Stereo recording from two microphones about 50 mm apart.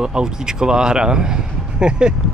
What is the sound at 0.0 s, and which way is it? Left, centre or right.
Speech, centre.